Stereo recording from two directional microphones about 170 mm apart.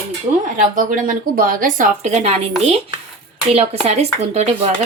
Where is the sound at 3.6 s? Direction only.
40° right (ahead or behind).